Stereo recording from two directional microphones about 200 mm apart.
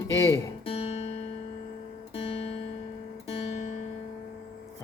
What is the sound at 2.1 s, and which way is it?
Music, 30° left (ahead or behind).